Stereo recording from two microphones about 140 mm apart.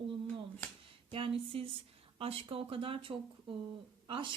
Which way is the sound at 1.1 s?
40° right (ahead or behind).